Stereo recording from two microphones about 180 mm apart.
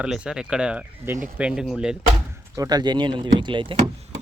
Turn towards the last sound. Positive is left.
turn(degrees=-25)  # may be behind; listen again after turning